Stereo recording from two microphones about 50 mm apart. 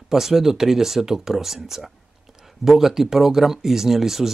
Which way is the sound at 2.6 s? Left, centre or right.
Centre.